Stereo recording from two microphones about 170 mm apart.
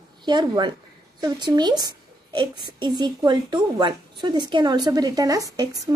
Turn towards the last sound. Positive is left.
turn(degrees=-25)  # may be behind; listen again after turning